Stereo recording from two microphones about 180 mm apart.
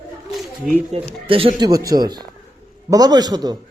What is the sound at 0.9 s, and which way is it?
Speech, 30° right (ahead or behind).